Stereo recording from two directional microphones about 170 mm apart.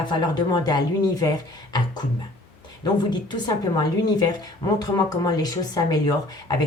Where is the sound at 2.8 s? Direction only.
25° left (ahead or behind).